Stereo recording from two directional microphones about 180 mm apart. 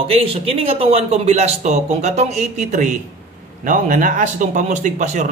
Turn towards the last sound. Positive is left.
turn(degrees=-40)  # may be behind; listen again after turning